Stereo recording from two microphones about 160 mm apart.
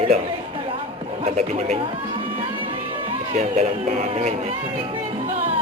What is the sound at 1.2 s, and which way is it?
Speech, 40° right (ahead or behind).